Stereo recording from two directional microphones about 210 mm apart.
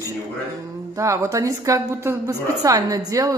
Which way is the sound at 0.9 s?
15° right (ahead or behind).